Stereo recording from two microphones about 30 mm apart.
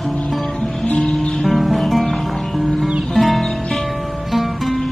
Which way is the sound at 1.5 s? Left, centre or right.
Centre.